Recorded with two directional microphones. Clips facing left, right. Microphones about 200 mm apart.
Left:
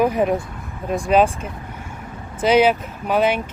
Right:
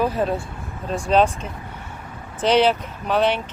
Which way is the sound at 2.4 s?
10° left (ahead or behind).